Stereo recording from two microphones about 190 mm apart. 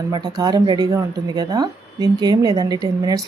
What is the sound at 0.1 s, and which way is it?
Speech, 20° right (ahead or behind).